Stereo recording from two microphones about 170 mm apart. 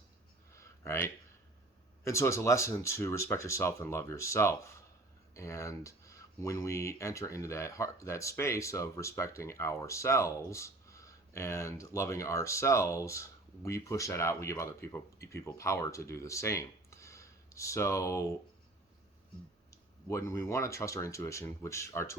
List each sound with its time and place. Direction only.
0.5 s a sound: 15° left (ahead or behind)
2.0 s speech: 15° left (ahead or behind)
19.7 s speech: 15° left (ahead or behind)